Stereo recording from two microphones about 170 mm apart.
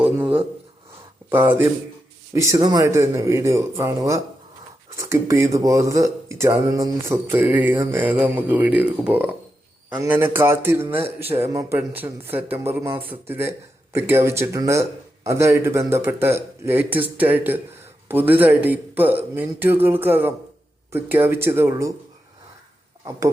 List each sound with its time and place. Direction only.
1.3 s speech: 10° right (ahead or behind)